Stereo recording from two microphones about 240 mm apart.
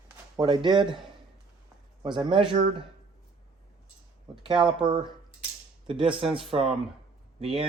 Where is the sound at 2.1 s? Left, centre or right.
Right.